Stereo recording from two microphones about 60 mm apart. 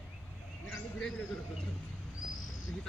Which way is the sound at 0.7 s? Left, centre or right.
Centre.